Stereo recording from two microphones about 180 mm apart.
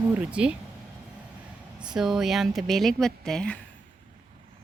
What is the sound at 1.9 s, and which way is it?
A woman's voice, 5° right (ahead or behind).